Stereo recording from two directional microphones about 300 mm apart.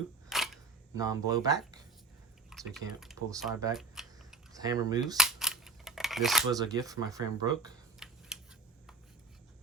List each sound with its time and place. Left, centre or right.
0.3 s single-lens reflex camera: centre
0.9 s speech: centre
2.5 s speech: centre
3.2 s speech: centre
3.8 s typing: centre
4.5 s speech: centre
5.1 s scissors: centre
6.5 s speech: centre
7.9 s a sound: centre